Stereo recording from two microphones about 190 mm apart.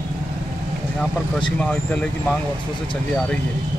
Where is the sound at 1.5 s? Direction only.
5° left (ahead or behind).